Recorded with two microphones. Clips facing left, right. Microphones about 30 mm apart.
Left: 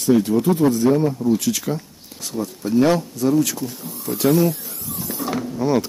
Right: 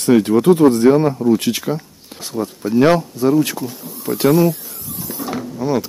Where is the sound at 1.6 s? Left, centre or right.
Centre.